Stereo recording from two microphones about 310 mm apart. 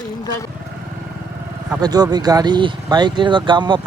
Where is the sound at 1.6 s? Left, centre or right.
Centre.